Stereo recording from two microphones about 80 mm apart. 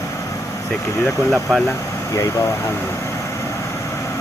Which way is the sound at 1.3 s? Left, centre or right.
Centre.